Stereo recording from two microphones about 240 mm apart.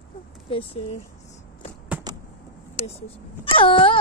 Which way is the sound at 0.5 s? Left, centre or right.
Left.